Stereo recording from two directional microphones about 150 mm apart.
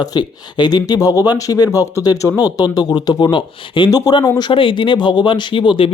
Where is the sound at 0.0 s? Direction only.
30° left (ahead or behind).